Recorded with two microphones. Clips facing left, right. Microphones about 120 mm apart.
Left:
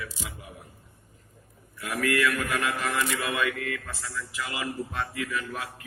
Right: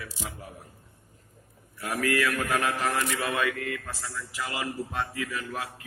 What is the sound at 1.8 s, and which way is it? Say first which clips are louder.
A man's voice: left 1 dB; 40° right (ahead or behind).